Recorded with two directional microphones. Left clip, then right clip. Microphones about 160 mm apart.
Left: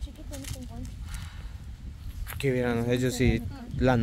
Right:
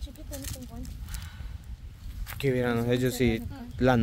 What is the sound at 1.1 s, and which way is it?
Clip-clop, 15° left (ahead or behind).